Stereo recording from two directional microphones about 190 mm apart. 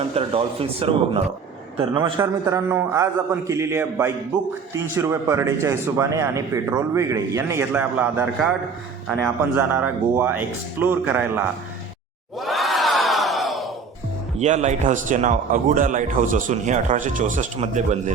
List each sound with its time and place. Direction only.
0.0 s a man's voice: 30° right (ahead or behind); by 8.5 s 5° right (ahead or behind)
9.7 s speech: 10° right (ahead or behind)
12.4 s crowd: centre (ahead or behind)
14.3 s speech: 35° right (ahead or behind)